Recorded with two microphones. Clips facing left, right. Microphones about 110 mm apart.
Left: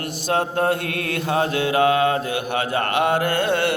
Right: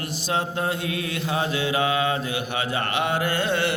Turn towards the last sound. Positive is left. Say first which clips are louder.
# left 3 dB
turn(degrees=50)  # may be behind; listen again after turning